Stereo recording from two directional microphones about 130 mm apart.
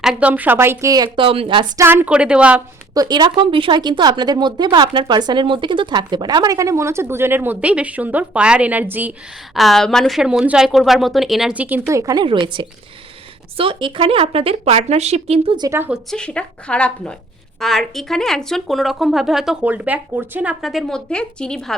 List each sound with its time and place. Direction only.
0.0 s speech: 5° right (ahead or behind); by 1.2 s 30° right (ahead or behind)
1.2 s speech: 45° right (ahead or behind)
1.7 s speech: 20° right (ahead or behind)
2.9 s speech: 30° right (ahead or behind); by 9.1 s 15° right (ahead or behind)
9.6 s speech: centre (ahead or behind)
11.6 s a woman's voice: 15° right (ahead or behind)
12.2 s speech: 40° right (ahead or behind); by 15.5 s 55° right (ahead or behind)
15.9 s a woman's voice: 5° left (ahead or behind)